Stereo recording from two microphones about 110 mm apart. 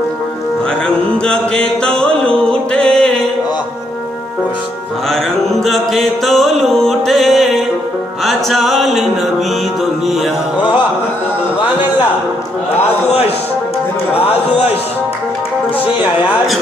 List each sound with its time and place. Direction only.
0.8 s music: 10° left (ahead or behind)
5.1 s music: centre (ahead or behind)
10.0 s mantra: centre (ahead or behind)
10.6 s music: 45° left (ahead or behind)